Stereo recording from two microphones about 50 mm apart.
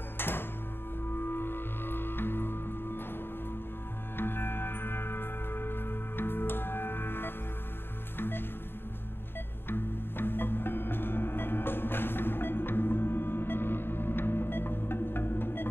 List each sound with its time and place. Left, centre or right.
0.2 s music: left
4.2 s music: left
9.7 s music: left